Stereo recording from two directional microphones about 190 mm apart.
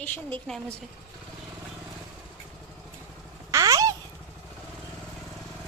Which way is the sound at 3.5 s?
15° right (ahead or behind).